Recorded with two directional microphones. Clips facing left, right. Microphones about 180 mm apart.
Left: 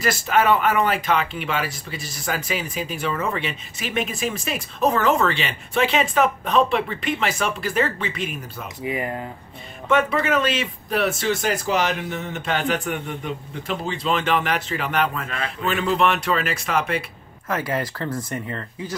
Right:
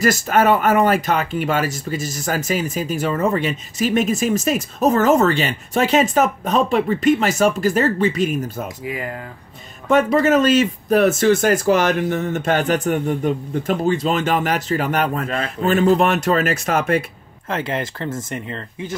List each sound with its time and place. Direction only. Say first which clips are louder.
0.0 s speech: right 4 dB; 45° right (ahead or behind)
9.8 s speech: right 5 dB; 40° right (ahead or behind)
17.5 s speech: right 1 dB; 25° right (ahead or behind)